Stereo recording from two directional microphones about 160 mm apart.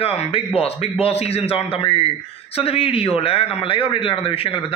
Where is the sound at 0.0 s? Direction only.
40° left (ahead or behind).